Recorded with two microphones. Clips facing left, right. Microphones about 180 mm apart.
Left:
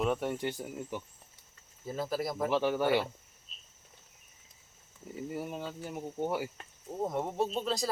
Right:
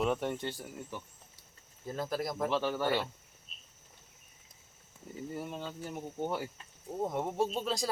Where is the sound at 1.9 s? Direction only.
5° left (ahead or behind).